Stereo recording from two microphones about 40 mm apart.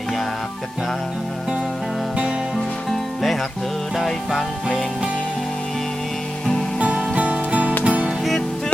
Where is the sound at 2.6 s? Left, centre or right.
Centre.